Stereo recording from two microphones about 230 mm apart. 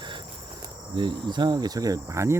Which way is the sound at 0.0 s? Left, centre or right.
Centre.